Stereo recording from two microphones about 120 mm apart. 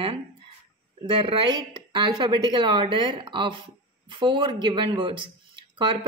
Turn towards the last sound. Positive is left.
turn(degrees=-40)  # may be behind; listen again after turning